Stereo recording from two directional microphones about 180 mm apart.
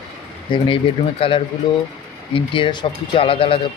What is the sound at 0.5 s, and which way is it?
Speech, 30° left (ahead or behind).